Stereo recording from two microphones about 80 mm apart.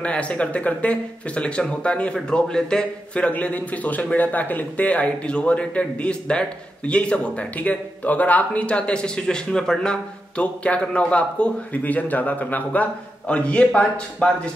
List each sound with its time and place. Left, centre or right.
0.0 s speech: centre